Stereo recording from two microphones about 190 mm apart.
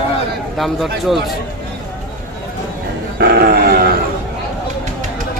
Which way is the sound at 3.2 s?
55° right (ahead or behind).